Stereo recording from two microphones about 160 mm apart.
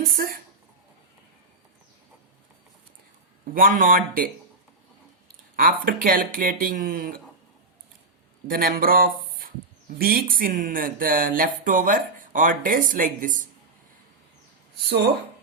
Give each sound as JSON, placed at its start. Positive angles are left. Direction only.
{"t": 0.2, "sound": "speech", "side_deg": -65}
{"t": 3.5, "sound": "speech", "side_deg": -60}
{"t": 5.5, "sound": "speech", "side_deg": -60}
{"t": 8.4, "sound": "speech", "side_deg": -65}